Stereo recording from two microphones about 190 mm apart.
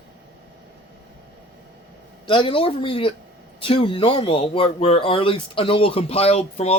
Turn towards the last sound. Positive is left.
turn(degrees=35)  # may be behind; listen again after turning